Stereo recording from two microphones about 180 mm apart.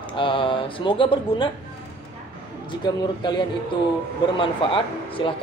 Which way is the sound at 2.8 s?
25° left (ahead or behind).